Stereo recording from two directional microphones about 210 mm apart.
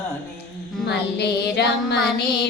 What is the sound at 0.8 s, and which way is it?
Music, 50° left (ahead or behind).